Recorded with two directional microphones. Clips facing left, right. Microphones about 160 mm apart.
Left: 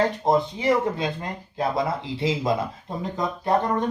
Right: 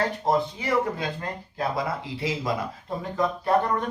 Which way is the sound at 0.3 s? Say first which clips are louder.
Left 3 dB; 20° left (ahead or behind).